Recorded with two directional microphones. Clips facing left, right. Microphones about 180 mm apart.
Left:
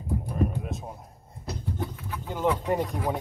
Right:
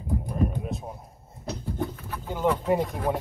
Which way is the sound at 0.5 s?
Centre (ahead or behind).